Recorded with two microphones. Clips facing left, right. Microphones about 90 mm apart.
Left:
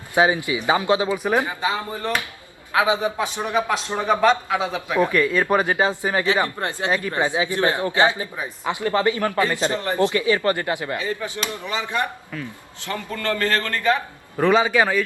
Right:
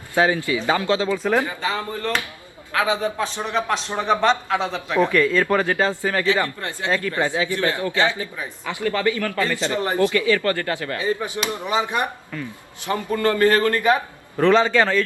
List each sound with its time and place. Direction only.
0.1 s a man's voice: 15° left (ahead or behind)
11.0 s a man's voice: 20° right (ahead or behind)
14.3 s speech: 10° left (ahead or behind)